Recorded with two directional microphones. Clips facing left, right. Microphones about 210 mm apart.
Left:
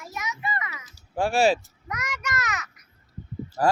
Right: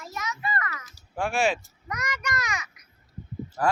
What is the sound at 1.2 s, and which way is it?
Speech, 35° left (ahead or behind).